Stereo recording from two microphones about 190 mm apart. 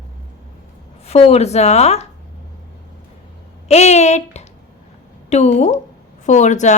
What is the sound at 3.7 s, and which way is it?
A woman's voice, 35° left (ahead or behind).